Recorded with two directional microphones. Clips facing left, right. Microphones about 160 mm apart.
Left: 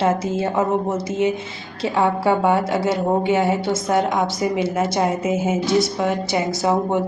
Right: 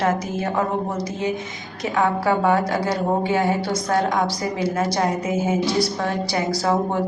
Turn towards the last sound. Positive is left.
turn(degrees=20)  # may be behind; listen again after turning